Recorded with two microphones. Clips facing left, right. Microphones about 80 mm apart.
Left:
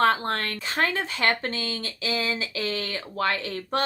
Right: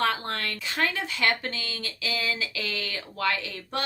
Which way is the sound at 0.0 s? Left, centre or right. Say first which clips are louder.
Left 5 dB; left.